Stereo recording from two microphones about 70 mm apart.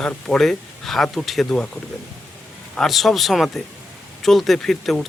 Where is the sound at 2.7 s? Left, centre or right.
Centre.